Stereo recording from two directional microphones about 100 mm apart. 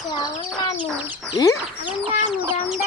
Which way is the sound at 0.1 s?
45° left (ahead or behind).